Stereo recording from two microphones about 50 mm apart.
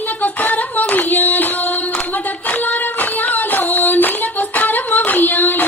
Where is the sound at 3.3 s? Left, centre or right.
Left.